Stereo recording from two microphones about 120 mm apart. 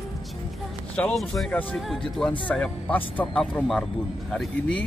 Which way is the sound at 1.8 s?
Centre (ahead or behind).